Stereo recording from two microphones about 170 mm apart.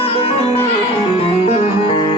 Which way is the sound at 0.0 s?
35° left (ahead or behind).